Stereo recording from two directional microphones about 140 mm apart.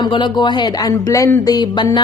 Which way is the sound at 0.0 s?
35° left (ahead or behind).